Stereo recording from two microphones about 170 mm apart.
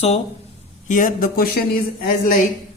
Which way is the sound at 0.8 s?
50° left (ahead or behind).